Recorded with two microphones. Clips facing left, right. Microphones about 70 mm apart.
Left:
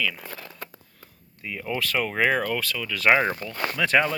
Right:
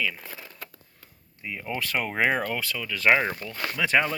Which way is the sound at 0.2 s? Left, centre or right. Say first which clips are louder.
Left 3 dB; centre.